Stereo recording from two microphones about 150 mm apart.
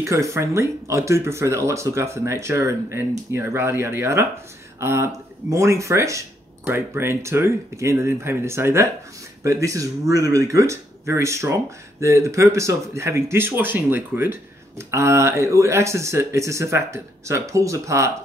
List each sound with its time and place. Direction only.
0.0 s speech: 20° right (ahead or behind)